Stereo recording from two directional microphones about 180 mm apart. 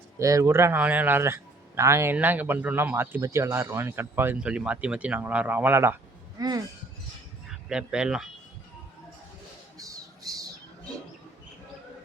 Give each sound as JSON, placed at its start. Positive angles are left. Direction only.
{"t": 0.2, "sound": "a man's voice", "side_deg": -15}
{"t": 7.5, "sound": "speech", "side_deg": -5}
{"t": 9.7, "sound": "squawk", "side_deg": -20}